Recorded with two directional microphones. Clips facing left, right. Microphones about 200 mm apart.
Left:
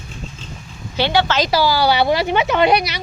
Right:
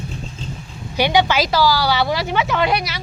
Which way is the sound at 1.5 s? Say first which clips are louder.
Left 2 dB; 20° left (ahead or behind).